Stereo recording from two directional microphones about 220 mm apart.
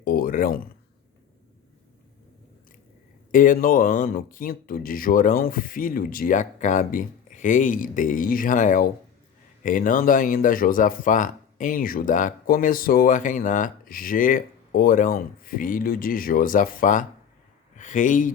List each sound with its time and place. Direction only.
0.0 s speech: 40° left (ahead or behind)
3.3 s speech: 40° left (ahead or behind)